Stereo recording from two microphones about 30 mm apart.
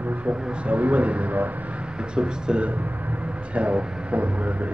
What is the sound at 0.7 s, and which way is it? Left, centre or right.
A man's voice, right.